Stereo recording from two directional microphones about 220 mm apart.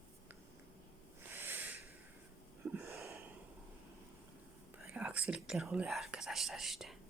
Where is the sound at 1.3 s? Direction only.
10° right (ahead or behind).